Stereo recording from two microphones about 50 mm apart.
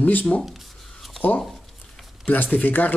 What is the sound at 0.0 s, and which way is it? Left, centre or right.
Speech, left.